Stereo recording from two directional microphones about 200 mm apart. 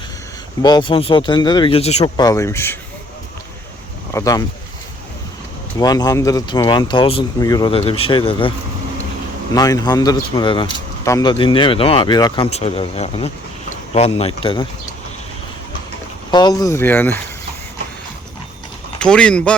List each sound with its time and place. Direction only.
0.6 s speech: 20° left (ahead or behind)
2.1 s speech: 15° left (ahead or behind)
4.1 s speech: 15° left (ahead or behind)
5.8 s speech: 20° left (ahead or behind)
9.6 s speech: 20° left (ahead or behind)
12.5 s speech: 30° left (ahead or behind)
16.3 s speech: 20° left (ahead or behind)
18.9 s speech: 5° left (ahead or behind)